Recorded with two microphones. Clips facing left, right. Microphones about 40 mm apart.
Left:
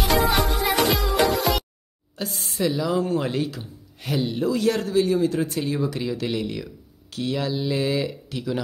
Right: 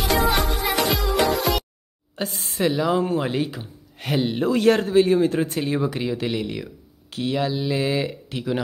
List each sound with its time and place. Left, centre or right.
0.3 s music: centre
2.2 s speech: right
3.1 s speech: centre
4.0 s speech: right
6.2 s speech: centre